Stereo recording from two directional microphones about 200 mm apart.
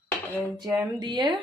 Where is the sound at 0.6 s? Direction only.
20° right (ahead or behind).